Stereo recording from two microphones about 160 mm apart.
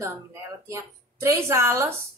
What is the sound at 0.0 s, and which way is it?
A woman's voice, 15° right (ahead or behind).